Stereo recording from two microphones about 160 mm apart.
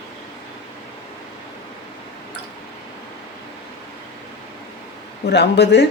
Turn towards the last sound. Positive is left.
turn(degrees=90)